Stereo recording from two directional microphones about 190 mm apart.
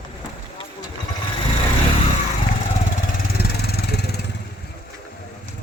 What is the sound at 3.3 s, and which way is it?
Vehicle, 55° left (ahead or behind).